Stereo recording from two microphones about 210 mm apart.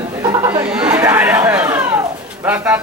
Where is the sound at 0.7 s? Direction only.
5° right (ahead or behind).